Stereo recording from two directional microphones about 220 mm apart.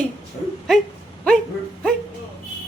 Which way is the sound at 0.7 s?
Centre (ahead or behind).